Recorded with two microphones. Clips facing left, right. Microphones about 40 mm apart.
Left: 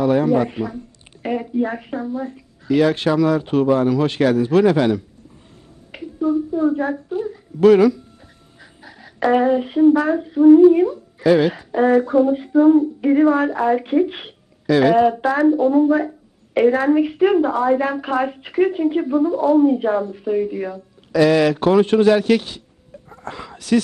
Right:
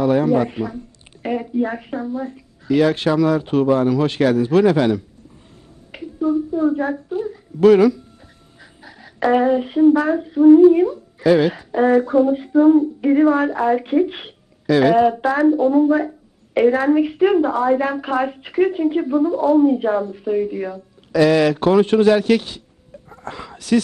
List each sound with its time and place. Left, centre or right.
0.0 s a woman's voice: centre
7.6 s a woman's voice: centre